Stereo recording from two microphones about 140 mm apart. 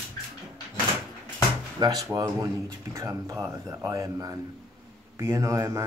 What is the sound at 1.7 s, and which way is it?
Speech, 30° right (ahead or behind).